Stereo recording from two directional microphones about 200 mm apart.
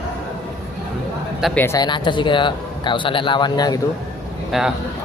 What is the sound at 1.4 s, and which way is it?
A man's voice, 10° left (ahead or behind).